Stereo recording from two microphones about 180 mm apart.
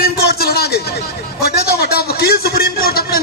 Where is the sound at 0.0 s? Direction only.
60° left (ahead or behind).